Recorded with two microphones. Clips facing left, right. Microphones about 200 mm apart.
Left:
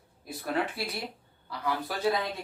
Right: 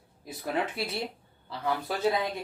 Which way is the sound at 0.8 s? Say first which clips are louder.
Right 2 dB; 25° right (ahead or behind).